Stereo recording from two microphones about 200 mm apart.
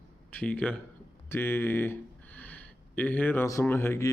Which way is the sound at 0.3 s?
5° left (ahead or behind).